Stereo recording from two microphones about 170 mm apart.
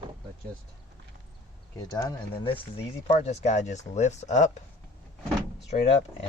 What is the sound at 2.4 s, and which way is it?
Speech, 35° left (ahead or behind).